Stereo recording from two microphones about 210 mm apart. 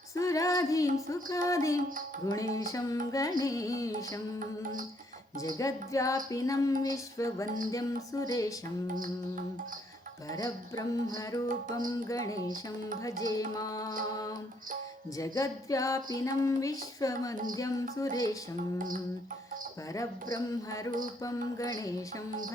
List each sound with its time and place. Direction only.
0.1 s female singing: 15° left (ahead or behind)
1.0 s music: 15° left (ahead or behind)
5.4 s music: 15° left (ahead or behind)
10.2 s music: 15° left (ahead or behind)
20.3 s music: 15° left (ahead or behind)